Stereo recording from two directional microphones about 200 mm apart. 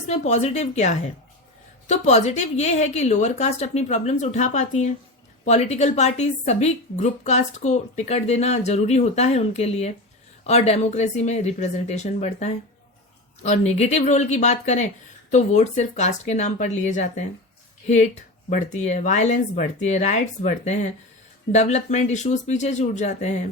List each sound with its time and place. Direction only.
0.1 s a woman's voice: 35° left (ahead or behind)